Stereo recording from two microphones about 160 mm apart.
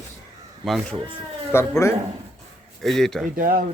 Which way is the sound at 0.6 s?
Centre (ahead or behind).